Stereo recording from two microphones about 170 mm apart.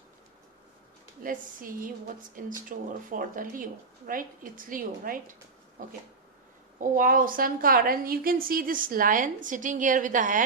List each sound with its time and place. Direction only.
1.2 s a woman's voice: 55° right (ahead or behind)
5.8 s a sound: 55° right (ahead or behind)
6.7 s a woman's voice: 55° right (ahead or behind)